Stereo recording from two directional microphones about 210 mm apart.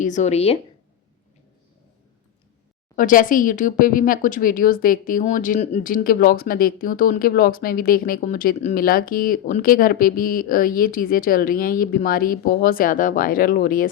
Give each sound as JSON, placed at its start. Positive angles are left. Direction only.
{"t": 0.0, "sound": "a woman's voice", "side_deg": 35}
{"t": 2.9, "sound": "speech", "side_deg": 40}